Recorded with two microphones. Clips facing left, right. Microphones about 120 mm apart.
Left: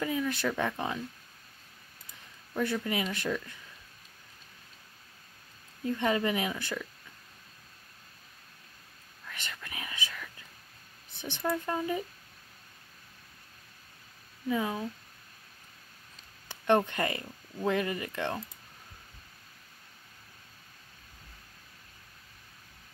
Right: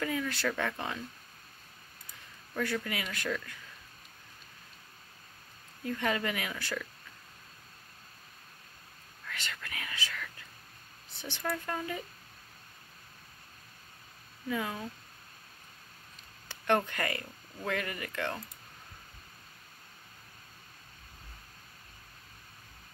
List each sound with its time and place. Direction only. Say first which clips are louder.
0.0 s speech: left 2 dB; 20° left (ahead or behind)
2.5 s speech: left 3 dB; 20° left (ahead or behind)
5.9 s speech: left 4 dB; 25° left (ahead or behind)
9.3 s whispering: right 1 dB; 20° left (ahead or behind)
11.1 s speech: left 4 dB; 20° left (ahead or behind)
14.5 s speech: left 4 dB; 20° left (ahead or behind)
16.4 s speech: left 3 dB; 20° left (ahead or behind)